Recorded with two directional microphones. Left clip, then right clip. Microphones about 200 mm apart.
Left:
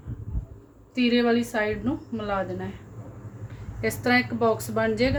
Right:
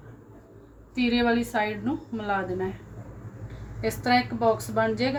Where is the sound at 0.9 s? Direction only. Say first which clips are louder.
Left 2 dB; 30° left (ahead or behind).